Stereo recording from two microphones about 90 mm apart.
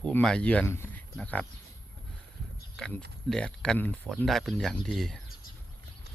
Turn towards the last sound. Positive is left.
turn(degrees=5)  # may be behind; listen again after turning